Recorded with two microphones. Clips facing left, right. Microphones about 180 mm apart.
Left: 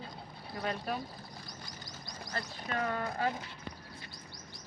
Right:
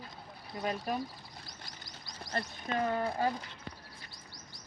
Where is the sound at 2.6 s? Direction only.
25° right (ahead or behind).